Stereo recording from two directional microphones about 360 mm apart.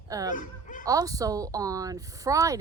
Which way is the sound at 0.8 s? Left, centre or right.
Centre.